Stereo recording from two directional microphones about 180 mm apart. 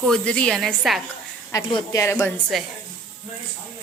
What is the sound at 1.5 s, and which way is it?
Speech, 25° left (ahead or behind).